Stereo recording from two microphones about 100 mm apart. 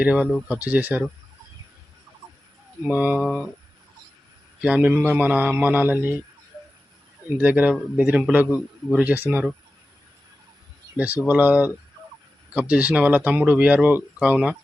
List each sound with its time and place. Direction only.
0.0 s speech: 10° right (ahead or behind)
2.8 s speech: 20° right (ahead or behind)
3.2 s speech: centre (ahead or behind)
4.6 s speech: 10° right (ahead or behind)
7.3 s speech: 15° right (ahead or behind)
10.9 s speech: 15° right (ahead or behind)